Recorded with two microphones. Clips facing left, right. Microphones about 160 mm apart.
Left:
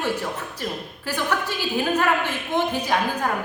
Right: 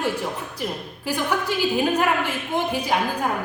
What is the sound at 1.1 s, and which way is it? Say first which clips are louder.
Speech: right 2 dB; 10° right (ahead or behind).